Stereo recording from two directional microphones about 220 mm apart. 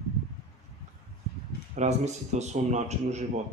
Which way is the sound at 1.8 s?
30° right (ahead or behind).